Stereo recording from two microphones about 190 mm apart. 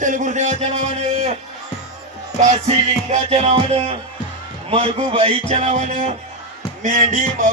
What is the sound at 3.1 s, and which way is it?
A man's voice, 35° right (ahead or behind).